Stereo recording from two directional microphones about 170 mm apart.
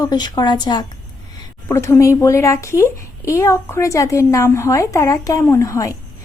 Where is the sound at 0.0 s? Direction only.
25° left (ahead or behind).